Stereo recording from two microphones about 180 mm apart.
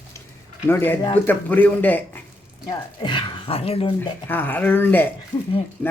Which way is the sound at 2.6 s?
25° left (ahead or behind).